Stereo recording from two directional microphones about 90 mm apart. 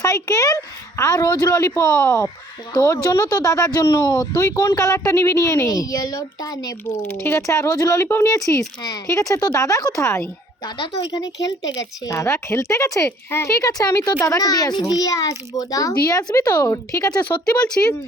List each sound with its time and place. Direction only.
0.0 s speech: 40° left (ahead or behind)
3.0 s speech: 45° left (ahead or behind)
7.2 s speech: 25° left (ahead or behind)
8.4 s speech: 40° left (ahead or behind)
11.1 s speech: 45° left (ahead or behind); by 13.5 s 25° left (ahead or behind)
13.6 s speech: 40° left (ahead or behind)
17.4 s speech: 10° left (ahead or behind)